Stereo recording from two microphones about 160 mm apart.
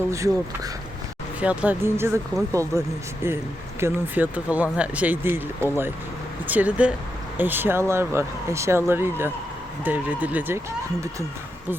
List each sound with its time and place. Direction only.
0.1 s speech: 20° right (ahead or behind)